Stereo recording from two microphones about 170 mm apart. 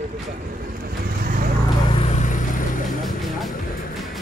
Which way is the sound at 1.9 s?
35° left (ahead or behind).